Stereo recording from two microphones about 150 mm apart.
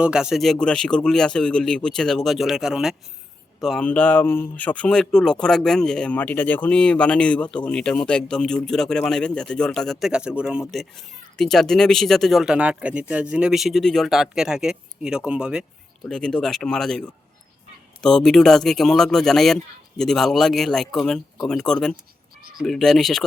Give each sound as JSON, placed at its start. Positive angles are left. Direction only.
{"t": 0.0, "sound": "speech", "side_deg": -5}
{"t": 16.0, "sound": "speech", "side_deg": 5}